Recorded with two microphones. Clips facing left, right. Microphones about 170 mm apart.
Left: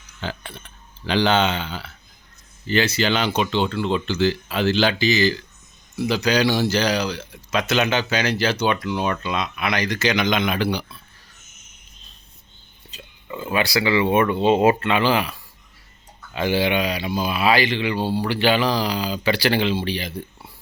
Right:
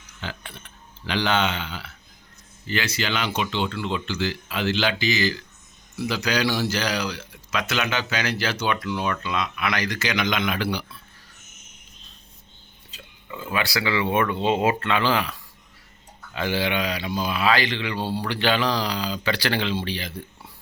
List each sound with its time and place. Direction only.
0.2 s speech: 30° left (ahead or behind)
13.3 s speech: 30° left (ahead or behind)
13.6 s speech: 15° left (ahead or behind)
14.4 s speech: 35° left (ahead or behind)
14.8 s speech: 15° left (ahead or behind)